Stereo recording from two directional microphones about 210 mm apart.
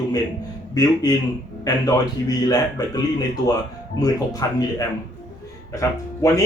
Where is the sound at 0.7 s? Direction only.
20° left (ahead or behind).